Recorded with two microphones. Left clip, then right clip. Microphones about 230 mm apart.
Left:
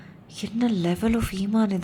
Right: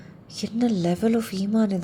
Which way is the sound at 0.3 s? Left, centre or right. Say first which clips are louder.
Right 1 dB; centre.